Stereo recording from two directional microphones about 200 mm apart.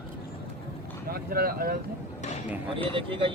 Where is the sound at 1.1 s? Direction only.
50° right (ahead or behind).